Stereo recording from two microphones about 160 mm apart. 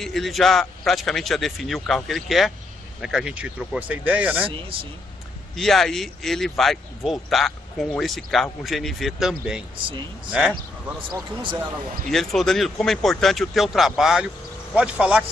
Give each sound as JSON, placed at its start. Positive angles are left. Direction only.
{"t": 0.0, "sound": "speech", "side_deg": 0}
{"t": 5.6, "sound": "speech", "side_deg": 0}
{"t": 12.1, "sound": "speech", "side_deg": 0}